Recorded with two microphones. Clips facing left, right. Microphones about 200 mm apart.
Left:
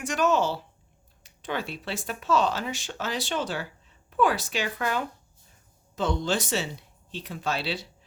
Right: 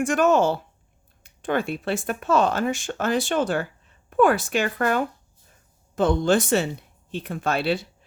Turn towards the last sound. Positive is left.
turn(degrees=-55)  # may be behind; listen again after turning